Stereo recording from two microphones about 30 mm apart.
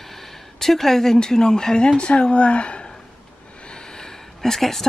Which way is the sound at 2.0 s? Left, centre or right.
Left.